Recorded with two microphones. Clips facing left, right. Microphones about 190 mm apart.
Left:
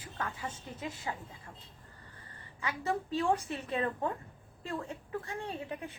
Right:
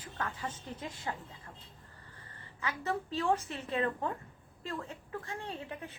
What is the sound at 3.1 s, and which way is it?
A woman's voice, 15° left (ahead or behind).